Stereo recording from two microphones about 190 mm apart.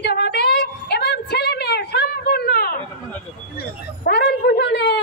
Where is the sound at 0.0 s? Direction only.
55° left (ahead or behind).